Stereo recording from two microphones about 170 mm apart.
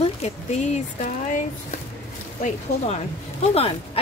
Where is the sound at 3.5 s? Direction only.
35° left (ahead or behind).